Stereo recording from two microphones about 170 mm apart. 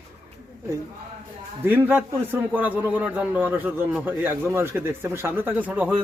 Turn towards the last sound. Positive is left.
turn(degrees=-10)  # may be behind; listen again after turning